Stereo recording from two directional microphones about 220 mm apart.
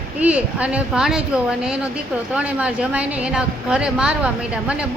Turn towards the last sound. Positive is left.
turn(degrees=-5)  # may be behind; listen again after turning